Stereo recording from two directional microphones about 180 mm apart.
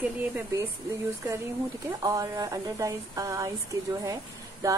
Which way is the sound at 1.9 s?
20° right (ahead or behind).